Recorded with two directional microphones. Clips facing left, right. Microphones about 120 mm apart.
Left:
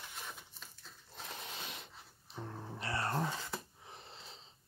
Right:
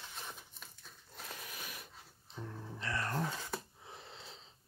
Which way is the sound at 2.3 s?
60° left (ahead or behind).